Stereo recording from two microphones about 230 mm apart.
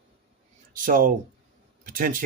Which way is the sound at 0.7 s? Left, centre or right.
Right.